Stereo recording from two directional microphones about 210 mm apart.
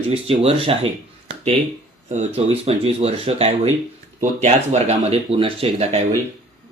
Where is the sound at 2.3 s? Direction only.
30° right (ahead or behind).